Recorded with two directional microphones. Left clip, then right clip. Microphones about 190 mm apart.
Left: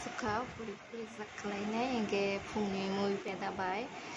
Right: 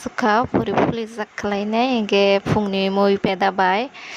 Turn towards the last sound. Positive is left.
turn(degrees=-50)  # may be behind; listen again after turning